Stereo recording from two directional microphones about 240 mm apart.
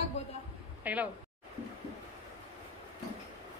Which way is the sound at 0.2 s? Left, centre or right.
Left.